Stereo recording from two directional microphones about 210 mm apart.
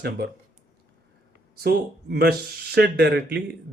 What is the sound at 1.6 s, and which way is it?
Speech, 50° right (ahead or behind).